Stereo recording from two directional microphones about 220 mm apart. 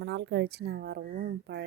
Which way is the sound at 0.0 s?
50° right (ahead or behind).